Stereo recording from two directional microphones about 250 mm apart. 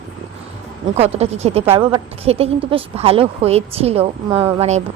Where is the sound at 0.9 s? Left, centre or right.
Right.